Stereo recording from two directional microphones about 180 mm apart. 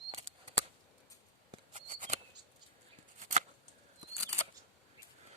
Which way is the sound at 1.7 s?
45° right (ahead or behind).